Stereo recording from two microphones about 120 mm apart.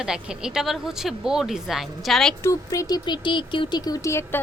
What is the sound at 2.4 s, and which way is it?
Speech, 25° left (ahead or behind).